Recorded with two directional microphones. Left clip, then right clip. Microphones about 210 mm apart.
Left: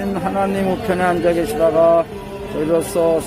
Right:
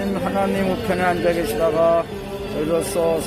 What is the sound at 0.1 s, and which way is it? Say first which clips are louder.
Speech: left 3 dB; 25° left (ahead or behind).